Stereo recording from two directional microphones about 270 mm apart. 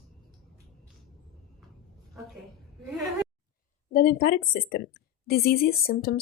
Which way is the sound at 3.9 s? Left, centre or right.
Left.